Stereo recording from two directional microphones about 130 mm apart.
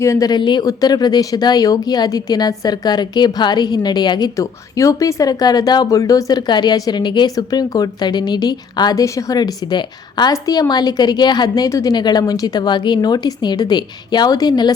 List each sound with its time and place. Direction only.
0.0 s speech: 25° left (ahead or behind)